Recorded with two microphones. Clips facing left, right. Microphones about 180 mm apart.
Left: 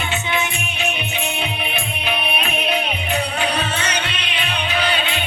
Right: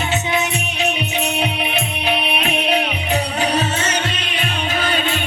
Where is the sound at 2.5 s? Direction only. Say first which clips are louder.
Right 4 dB; 70° right (ahead or behind).